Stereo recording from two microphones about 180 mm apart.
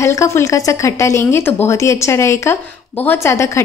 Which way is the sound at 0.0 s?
15° left (ahead or behind).